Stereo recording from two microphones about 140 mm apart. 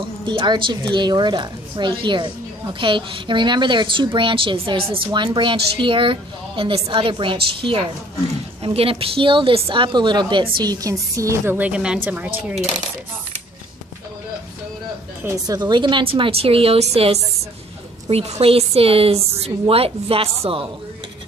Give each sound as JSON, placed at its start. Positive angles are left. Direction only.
{"t": 0.0, "sound": "a woman's voice", "side_deg": -35}
{"t": 8.6, "sound": "a woman's voice", "side_deg": -40}
{"t": 15.2, "sound": "a woman's voice", "side_deg": -25}